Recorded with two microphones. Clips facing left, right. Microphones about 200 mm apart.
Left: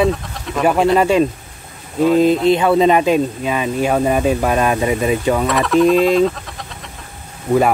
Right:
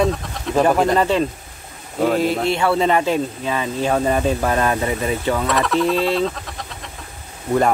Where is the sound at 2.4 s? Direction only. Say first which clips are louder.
Left 5 dB; 20° left (ahead or behind).